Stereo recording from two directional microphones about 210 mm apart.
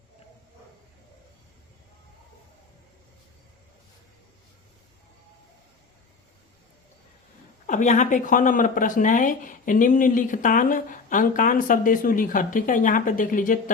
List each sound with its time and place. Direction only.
7.7 s speech: 35° left (ahead or behind)